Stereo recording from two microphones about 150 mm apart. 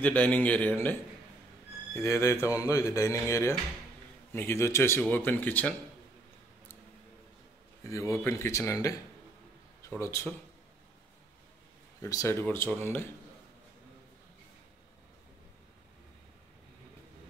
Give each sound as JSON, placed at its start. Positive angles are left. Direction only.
{"t": 0.0, "sound": "speech", "side_deg": 10}
{"t": 2.0, "sound": "speech", "side_deg": 20}
{"t": 7.8, "sound": "speech", "side_deg": 20}
{"t": 12.0, "sound": "speech", "side_deg": 20}